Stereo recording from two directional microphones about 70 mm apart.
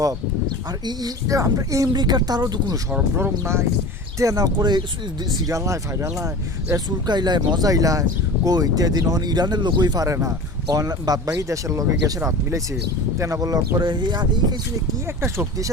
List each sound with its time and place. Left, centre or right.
1.5 s speech: right
2.0 s speech: right
3.2 s speech: right
4.2 s speech: right
5.5 s speech: right
7.1 s speech: right
7.7 s speech: right
15.0 s speech: right